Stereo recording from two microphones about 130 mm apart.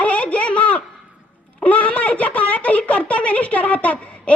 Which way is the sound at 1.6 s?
10° left (ahead or behind).